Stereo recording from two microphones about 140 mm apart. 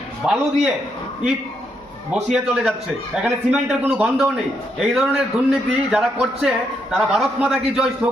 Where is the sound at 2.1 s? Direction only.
5° right (ahead or behind).